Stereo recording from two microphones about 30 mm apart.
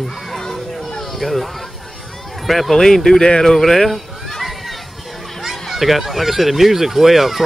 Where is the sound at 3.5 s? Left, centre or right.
Centre.